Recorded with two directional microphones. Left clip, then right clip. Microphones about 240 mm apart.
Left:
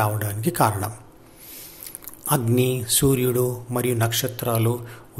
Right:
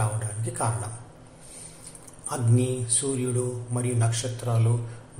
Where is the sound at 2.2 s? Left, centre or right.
Left.